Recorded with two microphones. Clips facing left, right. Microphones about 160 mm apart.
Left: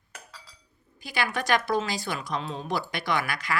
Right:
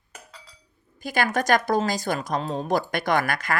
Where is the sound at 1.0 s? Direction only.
45° right (ahead or behind).